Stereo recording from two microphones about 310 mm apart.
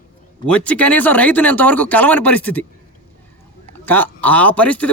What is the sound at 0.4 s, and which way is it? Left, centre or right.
Speech, centre.